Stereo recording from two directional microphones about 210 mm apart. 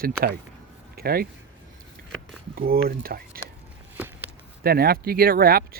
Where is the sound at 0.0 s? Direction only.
45° right (ahead or behind).